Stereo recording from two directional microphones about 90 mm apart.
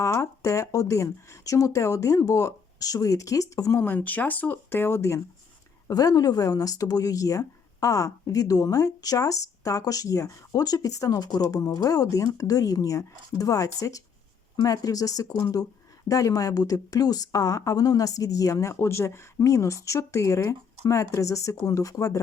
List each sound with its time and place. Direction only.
0.0 s speech: 35° left (ahead or behind)
3.8 s speech: 20° left (ahead or behind)
5.9 s speech: 40° left (ahead or behind)